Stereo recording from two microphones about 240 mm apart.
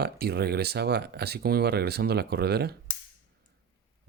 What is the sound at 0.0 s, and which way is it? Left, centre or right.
Speech, right.